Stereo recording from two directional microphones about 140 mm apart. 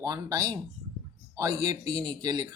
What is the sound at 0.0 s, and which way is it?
Speech, 25° right (ahead or behind).